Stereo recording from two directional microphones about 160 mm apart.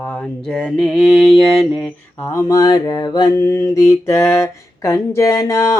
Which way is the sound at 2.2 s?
15° left (ahead or behind).